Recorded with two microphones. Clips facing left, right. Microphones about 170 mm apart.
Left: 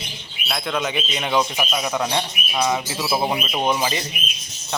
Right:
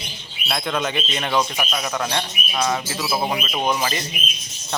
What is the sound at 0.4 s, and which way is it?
Speech, centre (ahead or behind).